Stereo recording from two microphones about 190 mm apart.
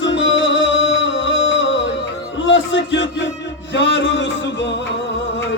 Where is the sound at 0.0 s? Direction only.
75° left (ahead or behind).